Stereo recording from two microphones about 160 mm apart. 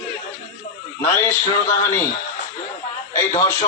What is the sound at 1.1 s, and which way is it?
Speech, 15° left (ahead or behind).